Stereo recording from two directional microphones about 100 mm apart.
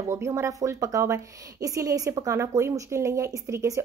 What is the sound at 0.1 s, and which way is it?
Speech, 30° right (ahead or behind).